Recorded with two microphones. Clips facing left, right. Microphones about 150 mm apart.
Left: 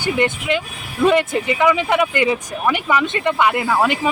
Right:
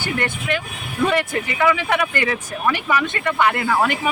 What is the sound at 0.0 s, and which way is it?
A woman's voice, 20° left (ahead or behind).